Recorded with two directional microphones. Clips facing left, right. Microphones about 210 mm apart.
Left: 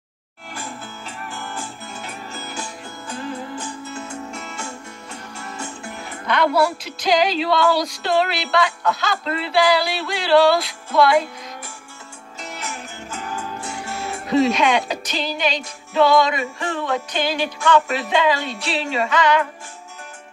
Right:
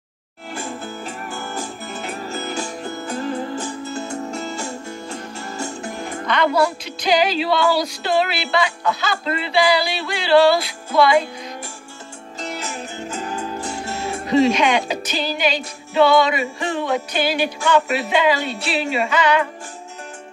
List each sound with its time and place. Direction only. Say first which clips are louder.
0.6 s music: right 5 dB; 45° right (ahead or behind)
6.2 s music: even; 5° left (ahead or behind)
12.4 s music: right 4 dB; 35° right (ahead or behind)
14.2 s music: right 1 dB; centre (ahead or behind)
16.6 s speech: right 2 dB; 15° right (ahead or behind)